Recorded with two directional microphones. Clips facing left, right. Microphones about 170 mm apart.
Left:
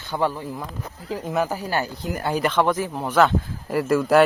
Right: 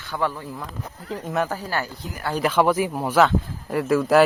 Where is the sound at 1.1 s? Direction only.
5° left (ahead or behind); by 2.3 s 20° left (ahead or behind).